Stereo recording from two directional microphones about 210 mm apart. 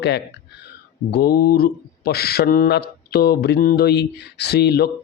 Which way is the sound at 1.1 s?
45° left (ahead or behind).